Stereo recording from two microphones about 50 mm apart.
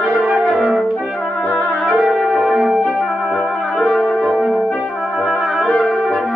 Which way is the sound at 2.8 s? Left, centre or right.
Centre.